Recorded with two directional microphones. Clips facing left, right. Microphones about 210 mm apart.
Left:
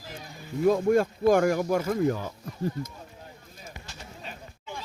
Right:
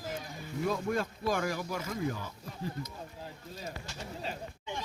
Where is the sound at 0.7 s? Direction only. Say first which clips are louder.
Left 11 dB; 50° left (ahead or behind).